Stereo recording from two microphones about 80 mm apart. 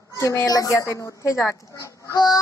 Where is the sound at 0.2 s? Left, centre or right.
Left.